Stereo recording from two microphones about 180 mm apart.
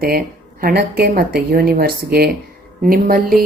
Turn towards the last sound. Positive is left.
turn(degrees=-55)  # may be behind; listen again after turning